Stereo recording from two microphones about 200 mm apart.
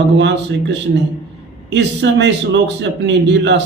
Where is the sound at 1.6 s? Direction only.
60° right (ahead or behind).